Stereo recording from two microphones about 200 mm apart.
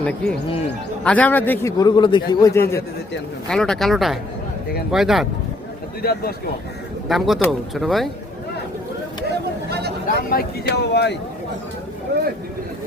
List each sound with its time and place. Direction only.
1.0 s a man's voice: 5° left (ahead or behind)
1.8 s a man's voice: 20° left (ahead or behind)
3.5 s speech: 5° left (ahead or behind)
6.0 s speech: 50° left (ahead or behind)
7.1 s speech: centre (ahead or behind)
9.3 s chatter: 55° right (ahead or behind)
10.2 s speech: 50° left (ahead or behind)